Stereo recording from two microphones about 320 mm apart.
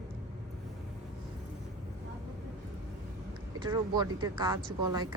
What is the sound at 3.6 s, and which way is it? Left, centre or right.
Speech, centre.